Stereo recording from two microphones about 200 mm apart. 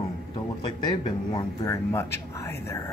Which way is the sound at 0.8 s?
20° left (ahead or behind).